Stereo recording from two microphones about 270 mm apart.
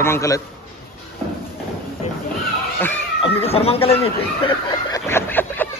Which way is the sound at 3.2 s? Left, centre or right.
Left.